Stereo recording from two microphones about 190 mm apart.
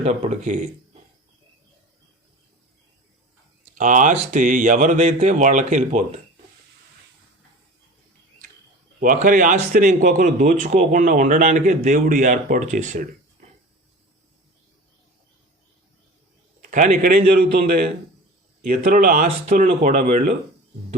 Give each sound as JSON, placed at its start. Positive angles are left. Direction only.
{"t": 0.0, "sound": "speech", "side_deg": -35}
{"t": 3.8, "sound": "speech", "side_deg": -40}
{"t": 9.0, "sound": "a man's voice", "side_deg": -45}
{"t": 16.6, "sound": "a man's voice", "side_deg": -45}
{"t": 18.6, "sound": "speech", "side_deg": -50}